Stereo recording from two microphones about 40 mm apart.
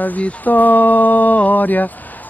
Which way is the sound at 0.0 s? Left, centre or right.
Left.